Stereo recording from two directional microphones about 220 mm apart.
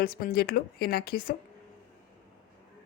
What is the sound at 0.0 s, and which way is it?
Speech, 40° left (ahead or behind).